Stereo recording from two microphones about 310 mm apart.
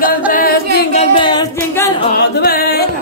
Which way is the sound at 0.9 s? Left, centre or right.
Centre.